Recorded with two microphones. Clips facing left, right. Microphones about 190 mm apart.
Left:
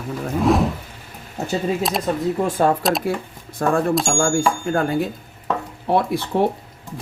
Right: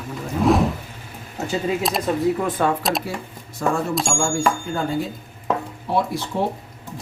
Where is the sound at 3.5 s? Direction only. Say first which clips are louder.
Left 4 dB; 55° left (ahead or behind).